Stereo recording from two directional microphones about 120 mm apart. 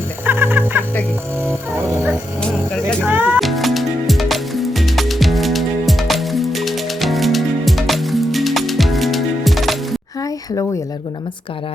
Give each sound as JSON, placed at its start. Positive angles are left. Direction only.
{"t": 0.3, "sound": "music", "side_deg": -15}
{"t": 3.1, "sound": "music", "side_deg": -15}
{"t": 3.4, "sound": "music", "side_deg": 0}
{"t": 10.2, "sound": "a sound", "side_deg": 30}